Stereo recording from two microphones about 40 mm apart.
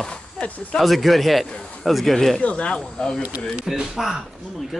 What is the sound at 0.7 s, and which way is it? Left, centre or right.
Speech, centre.